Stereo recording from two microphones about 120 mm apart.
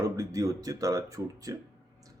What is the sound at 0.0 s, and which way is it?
Speech, 30° right (ahead or behind).